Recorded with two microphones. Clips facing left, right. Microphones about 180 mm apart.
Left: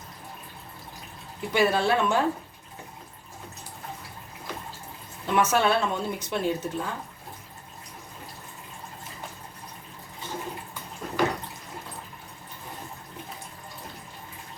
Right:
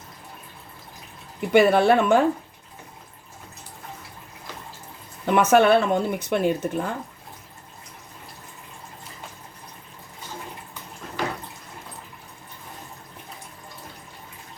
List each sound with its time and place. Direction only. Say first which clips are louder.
1.5 s speech: right 7 dB; 60° right (ahead or behind)
5.2 s speech: right 6 dB; 60° right (ahead or behind)